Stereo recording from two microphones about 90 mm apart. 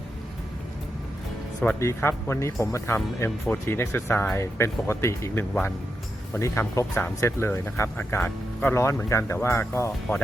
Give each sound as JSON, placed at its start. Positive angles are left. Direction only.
{"t": 1.8, "sound": "speech", "side_deg": 30}